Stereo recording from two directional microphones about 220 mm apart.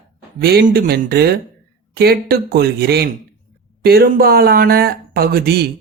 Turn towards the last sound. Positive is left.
turn(degrees=-45)  # may be behind; listen again after turning